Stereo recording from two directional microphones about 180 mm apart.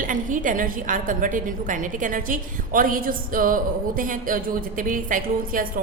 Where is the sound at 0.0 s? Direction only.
45° right (ahead or behind).